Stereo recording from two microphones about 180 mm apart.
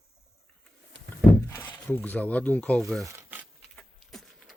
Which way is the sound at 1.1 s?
10° left (ahead or behind).